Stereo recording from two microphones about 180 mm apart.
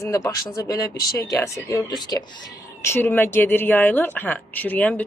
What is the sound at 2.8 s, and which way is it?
Speech, 10° left (ahead or behind).